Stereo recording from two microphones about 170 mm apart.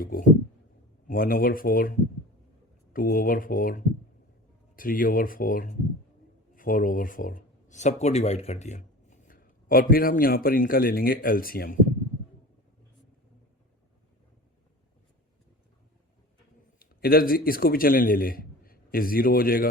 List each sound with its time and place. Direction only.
0.0 s speech: 55° left (ahead or behind)
4.8 s speech: 55° left (ahead or behind)
16.8 s a man's voice: 60° left (ahead or behind)